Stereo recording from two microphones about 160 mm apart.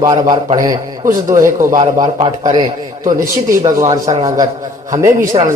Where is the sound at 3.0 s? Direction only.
20° right (ahead or behind).